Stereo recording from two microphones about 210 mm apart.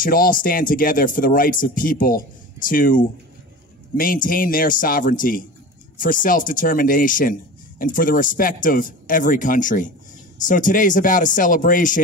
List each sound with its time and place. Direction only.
0.0 s speech: 40° left (ahead or behind)